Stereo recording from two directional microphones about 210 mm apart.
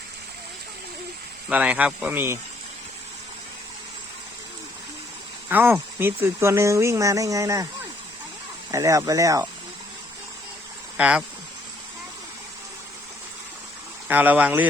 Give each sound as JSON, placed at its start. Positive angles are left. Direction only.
{"t": 1.5, "sound": "speech", "side_deg": -5}
{"t": 5.5, "sound": "speech", "side_deg": -10}
{"t": 8.7, "sound": "speech", "side_deg": -15}
{"t": 10.9, "sound": "speech", "side_deg": -5}
{"t": 14.1, "sound": "speech", "side_deg": -10}